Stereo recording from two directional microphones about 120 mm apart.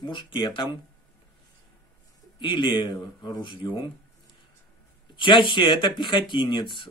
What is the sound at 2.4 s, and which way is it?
Speech, 40° left (ahead or behind).